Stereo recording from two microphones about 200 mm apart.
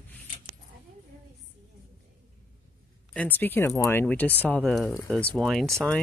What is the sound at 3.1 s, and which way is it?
Speech, 10° left (ahead or behind).